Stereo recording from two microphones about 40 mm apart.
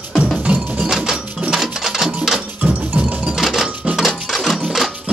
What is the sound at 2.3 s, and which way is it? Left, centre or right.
Music, right.